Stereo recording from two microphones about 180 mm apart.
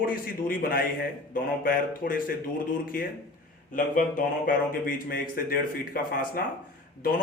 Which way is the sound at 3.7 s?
50° left (ahead or behind).